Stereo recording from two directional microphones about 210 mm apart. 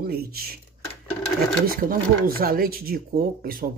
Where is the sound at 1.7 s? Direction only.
45° right (ahead or behind).